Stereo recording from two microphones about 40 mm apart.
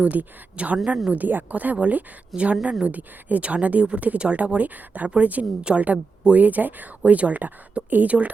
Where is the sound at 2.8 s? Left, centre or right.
Right.